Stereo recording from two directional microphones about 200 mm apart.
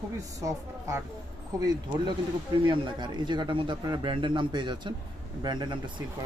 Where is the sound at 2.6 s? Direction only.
20° right (ahead or behind).